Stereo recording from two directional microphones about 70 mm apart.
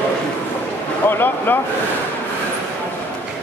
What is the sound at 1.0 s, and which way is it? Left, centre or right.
Speech, left.